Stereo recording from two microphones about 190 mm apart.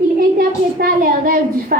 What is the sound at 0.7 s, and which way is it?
A woman's voice, 50° right (ahead or behind).